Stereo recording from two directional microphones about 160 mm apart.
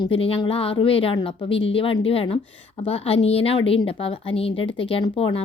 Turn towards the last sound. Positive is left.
turn(degrees=35)  # may be behind; listen again after turning